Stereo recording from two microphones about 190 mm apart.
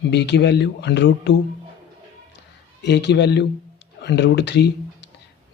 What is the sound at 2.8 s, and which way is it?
Speech, 65° left (ahead or behind).